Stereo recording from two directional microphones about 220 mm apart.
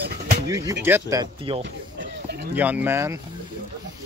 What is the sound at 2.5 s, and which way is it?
Speech, 5° right (ahead or behind).